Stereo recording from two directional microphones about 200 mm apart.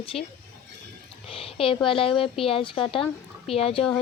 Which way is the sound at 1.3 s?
30° left (ahead or behind).